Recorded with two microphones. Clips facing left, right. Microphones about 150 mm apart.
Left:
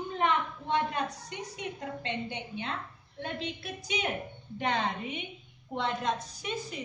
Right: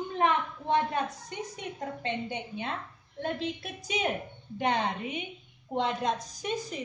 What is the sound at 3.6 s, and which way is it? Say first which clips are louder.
A woman's voice: right 2 dB; 45° right (ahead or behind).